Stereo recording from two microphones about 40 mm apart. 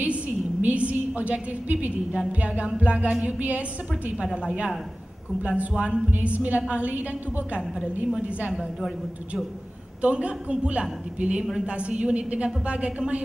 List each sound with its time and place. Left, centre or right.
0.0 s a sound: right
2.1 s a woman's voice: right
4.2 s a woman's voice: right
5.6 s a woman's voice: right
6.2 s a woman's voice: right
10.0 s a woman's voice: right